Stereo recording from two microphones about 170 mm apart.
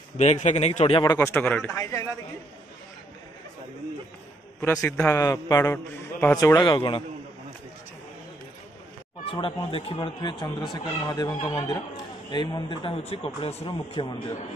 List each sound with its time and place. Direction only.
0.2 s speech: 45° left (ahead or behind)
1.2 s a man's voice: 10° left (ahead or behind)
4.6 s a man's voice: 15° left (ahead or behind)
5.1 s speech: 20° left (ahead or behind)
9.2 s speech: 30° left (ahead or behind)